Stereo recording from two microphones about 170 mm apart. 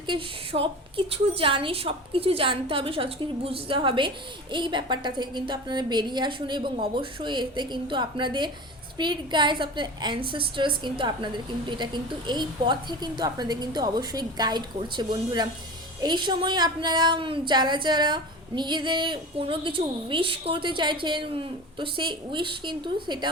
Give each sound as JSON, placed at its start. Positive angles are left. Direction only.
{"t": 0.1, "sound": "a woman's voice", "side_deg": -35}